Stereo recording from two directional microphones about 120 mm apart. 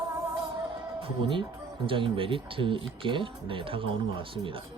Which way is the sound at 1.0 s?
45° right (ahead or behind).